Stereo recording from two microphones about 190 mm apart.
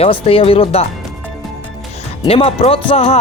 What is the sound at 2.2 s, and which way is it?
Speech, 30° left (ahead or behind).